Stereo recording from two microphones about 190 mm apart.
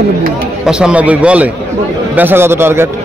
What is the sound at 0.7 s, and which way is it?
A man's voice, 5° right (ahead or behind).